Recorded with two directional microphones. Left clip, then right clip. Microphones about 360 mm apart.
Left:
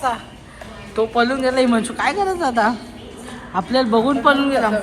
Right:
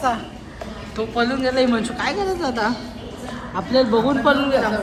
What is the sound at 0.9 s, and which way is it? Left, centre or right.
A woman's voice, centre.